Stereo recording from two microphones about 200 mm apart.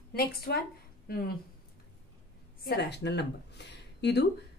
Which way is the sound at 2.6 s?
55° left (ahead or behind).